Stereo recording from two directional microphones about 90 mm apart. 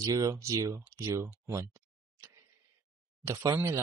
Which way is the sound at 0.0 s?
35° right (ahead or behind).